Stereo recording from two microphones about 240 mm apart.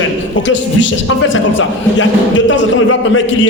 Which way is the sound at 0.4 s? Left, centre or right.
Left.